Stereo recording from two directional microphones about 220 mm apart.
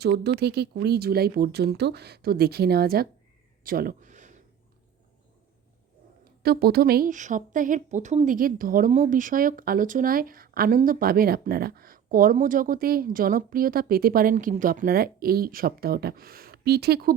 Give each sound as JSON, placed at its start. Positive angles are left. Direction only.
{"t": 0.0, "sound": "speech", "side_deg": -50}
{"t": 3.6, "sound": "a sound", "side_deg": -40}
{"t": 6.4, "sound": "a woman's voice", "side_deg": -45}